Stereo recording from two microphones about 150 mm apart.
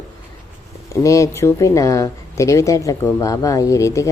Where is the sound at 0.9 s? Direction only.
20° left (ahead or behind).